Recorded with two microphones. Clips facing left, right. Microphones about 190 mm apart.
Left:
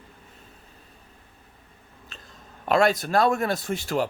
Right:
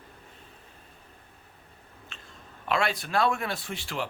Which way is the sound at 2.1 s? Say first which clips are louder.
Left 4 dB; 40° left (ahead or behind).